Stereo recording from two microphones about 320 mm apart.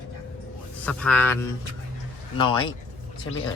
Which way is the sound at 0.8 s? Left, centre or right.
Centre.